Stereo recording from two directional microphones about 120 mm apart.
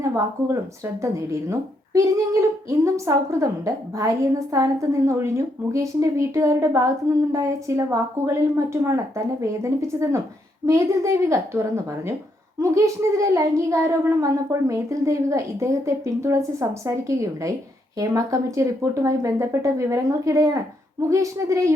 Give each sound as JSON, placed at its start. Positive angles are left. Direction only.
{"t": 0.0, "sound": "a woman's voice", "side_deg": -25}